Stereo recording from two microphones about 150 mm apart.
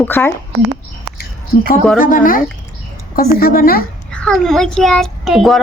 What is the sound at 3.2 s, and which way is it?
Speech, 85° left.